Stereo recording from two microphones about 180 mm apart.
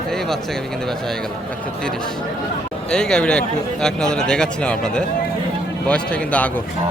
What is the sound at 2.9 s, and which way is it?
A man's voice, 5° left (ahead or behind).